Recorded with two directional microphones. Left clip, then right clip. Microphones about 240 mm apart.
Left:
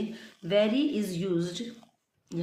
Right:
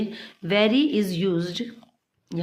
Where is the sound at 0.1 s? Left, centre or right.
Right.